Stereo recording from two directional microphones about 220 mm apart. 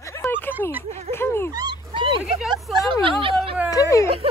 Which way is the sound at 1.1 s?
10° left (ahead or behind).